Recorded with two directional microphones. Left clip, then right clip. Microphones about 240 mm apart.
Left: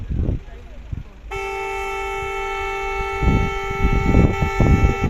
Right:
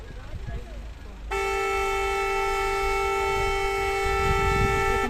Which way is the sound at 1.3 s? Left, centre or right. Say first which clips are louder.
Even; right.